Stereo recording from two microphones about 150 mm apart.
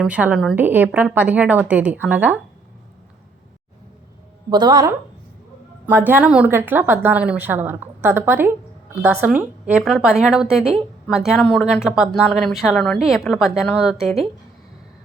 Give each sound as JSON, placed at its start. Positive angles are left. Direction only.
{"t": 0.0, "sound": "a woman's voice", "side_deg": -10}
{"t": 4.4, "sound": "a woman's voice", "side_deg": -30}
{"t": 5.8, "sound": "a woman's voice", "side_deg": -15}